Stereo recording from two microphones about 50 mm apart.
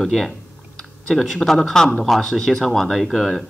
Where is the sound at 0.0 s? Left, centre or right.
Centre.